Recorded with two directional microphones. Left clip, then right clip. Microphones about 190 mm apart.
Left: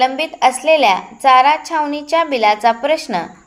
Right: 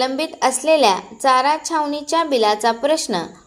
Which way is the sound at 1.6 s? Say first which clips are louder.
Left 2 dB; 35° right (ahead or behind).